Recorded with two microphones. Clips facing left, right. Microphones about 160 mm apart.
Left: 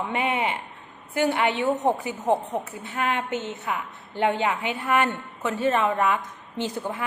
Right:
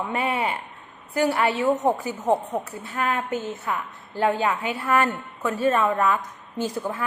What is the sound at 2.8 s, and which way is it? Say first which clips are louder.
A woman's voice: even; 20° left (ahead or behind).